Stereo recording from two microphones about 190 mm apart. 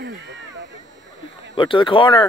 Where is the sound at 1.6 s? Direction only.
25° left (ahead or behind).